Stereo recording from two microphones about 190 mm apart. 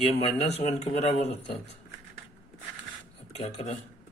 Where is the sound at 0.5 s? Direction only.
35° left (ahead or behind).